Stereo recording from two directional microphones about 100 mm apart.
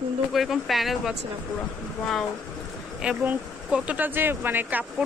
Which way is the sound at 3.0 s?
10° right (ahead or behind).